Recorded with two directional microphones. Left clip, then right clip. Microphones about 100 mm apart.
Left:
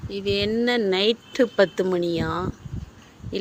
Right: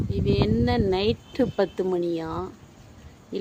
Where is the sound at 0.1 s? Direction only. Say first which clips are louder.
Left 2 dB; 15° right (ahead or behind).